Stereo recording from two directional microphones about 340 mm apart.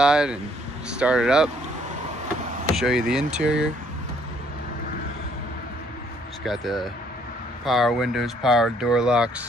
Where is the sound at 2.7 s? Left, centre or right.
Centre.